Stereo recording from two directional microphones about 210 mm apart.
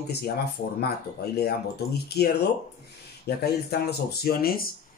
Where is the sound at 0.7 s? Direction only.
50° left (ahead or behind).